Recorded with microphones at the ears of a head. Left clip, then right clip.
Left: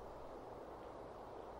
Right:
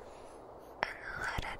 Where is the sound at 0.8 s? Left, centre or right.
Right.